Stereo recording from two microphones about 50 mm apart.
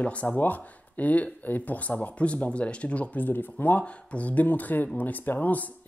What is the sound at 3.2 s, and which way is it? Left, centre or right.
Speech, left.